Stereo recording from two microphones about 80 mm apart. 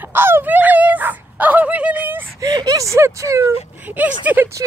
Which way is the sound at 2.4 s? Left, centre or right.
Right.